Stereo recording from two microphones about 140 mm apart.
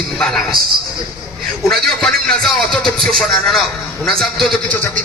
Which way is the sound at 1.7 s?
5° left (ahead or behind).